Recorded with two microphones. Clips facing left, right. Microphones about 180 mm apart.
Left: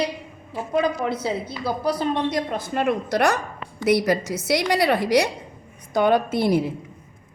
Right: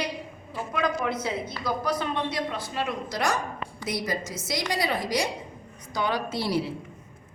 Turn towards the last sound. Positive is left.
turn(degrees=50)  # may be behind; listen again after turning